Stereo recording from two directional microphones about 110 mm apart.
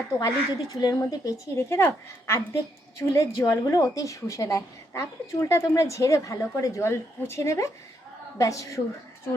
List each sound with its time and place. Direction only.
0.2 s a woman's voice: 35° left (ahead or behind)